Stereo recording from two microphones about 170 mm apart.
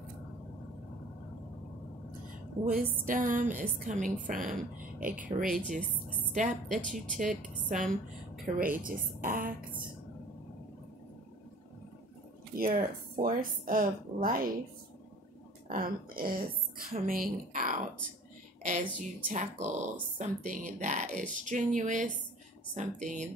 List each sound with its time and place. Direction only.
2.6 s a woman's voice: 55° right (ahead or behind)
5.1 s speech: 5° right (ahead or behind)
5.8 s a woman's voice: 10° left (ahead or behind)
6.3 s a woman's voice: 50° right (ahead or behind)
12.5 s speech: 60° right (ahead or behind)
15.7 s a woman's voice: 60° right (ahead or behind); by 23.3 s 40° right (ahead or behind)